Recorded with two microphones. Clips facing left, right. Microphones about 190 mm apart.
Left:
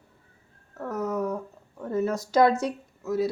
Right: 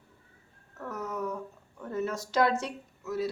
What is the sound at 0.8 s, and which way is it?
Speech, 40° left (ahead or behind).